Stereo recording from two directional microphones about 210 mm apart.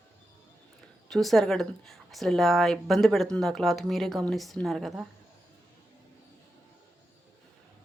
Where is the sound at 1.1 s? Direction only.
Centre (ahead or behind).